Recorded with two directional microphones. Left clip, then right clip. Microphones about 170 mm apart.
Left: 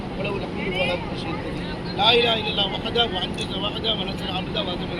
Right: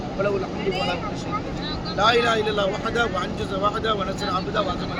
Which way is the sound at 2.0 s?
25° right (ahead or behind).